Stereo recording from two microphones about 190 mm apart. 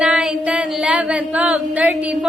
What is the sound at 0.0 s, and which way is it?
Singing, 5° right (ahead or behind).